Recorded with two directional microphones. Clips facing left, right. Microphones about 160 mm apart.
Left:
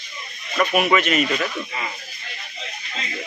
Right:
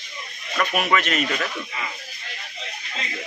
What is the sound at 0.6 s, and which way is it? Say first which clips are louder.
Speech: left 4 dB; 5° left (ahead or behind).